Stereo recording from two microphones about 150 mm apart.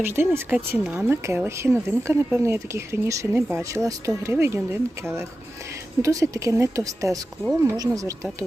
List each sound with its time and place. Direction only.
0.0 s speech: 15° right (ahead or behind)